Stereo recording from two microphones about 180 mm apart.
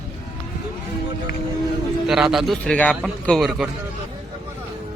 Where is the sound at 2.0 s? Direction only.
5° right (ahead or behind).